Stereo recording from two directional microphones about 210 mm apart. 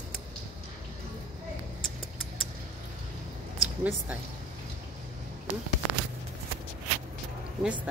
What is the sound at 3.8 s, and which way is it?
Speech, 5° right (ahead or behind).